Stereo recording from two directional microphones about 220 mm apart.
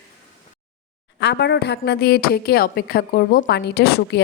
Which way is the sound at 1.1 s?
50° left (ahead or behind).